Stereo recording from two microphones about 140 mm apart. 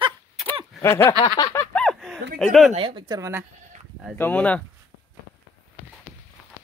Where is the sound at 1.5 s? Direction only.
5° left (ahead or behind).